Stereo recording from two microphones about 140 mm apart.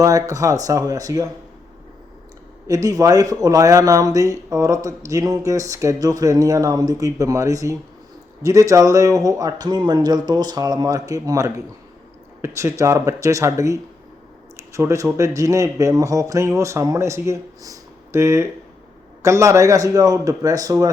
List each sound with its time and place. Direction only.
0.0 s speech: 25° right (ahead or behind)
2.6 s speech: 25° right (ahead or behind)